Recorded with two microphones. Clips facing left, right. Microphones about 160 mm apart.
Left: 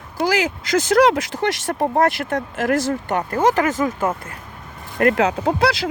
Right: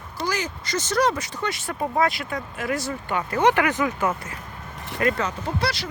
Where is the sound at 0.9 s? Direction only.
90° left.